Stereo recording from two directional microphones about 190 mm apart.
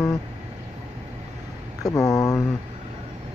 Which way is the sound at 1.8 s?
15° left (ahead or behind).